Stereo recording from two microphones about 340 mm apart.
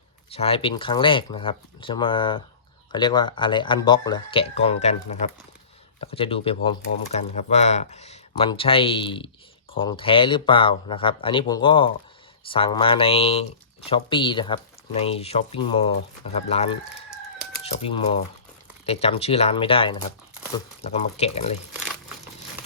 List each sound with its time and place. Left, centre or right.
0.3 s speech: centre